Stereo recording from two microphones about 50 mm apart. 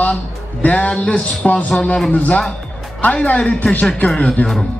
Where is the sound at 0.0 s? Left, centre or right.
Left.